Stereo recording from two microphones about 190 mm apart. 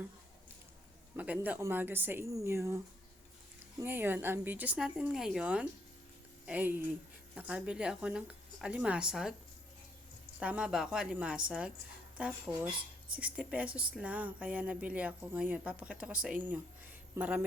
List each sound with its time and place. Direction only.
1.1 s speech: 10° right (ahead or behind)
3.8 s speech: 10° right (ahead or behind)
10.4 s speech: 5° right (ahead or behind)